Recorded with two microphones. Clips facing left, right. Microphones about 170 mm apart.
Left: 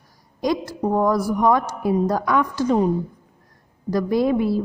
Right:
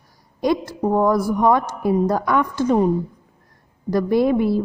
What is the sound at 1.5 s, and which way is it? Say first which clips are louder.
A woman's voice: right 1 dB; 55° right (ahead or behind).